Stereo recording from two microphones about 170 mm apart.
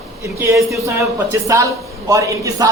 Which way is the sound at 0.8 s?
20° right (ahead or behind).